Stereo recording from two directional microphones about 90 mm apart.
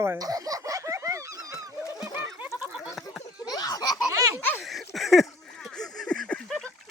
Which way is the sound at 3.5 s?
45° left (ahead or behind).